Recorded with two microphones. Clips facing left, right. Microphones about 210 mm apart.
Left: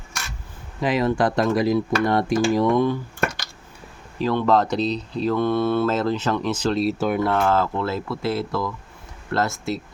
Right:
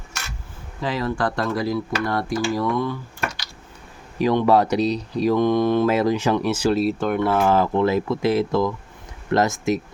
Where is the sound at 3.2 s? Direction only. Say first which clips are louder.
Left 4 dB; 50° left (ahead or behind).